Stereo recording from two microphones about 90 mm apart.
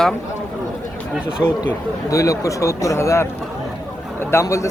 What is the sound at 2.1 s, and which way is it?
Speech, 40° left (ahead or behind).